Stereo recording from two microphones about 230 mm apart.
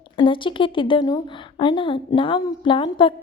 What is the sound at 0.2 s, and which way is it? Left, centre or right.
A woman's voice, left.